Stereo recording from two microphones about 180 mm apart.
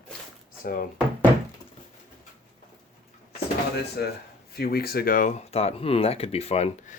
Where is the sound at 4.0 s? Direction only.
65° left (ahead or behind).